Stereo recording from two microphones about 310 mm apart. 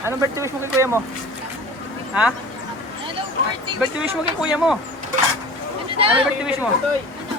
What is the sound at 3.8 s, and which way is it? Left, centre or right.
Speech, centre.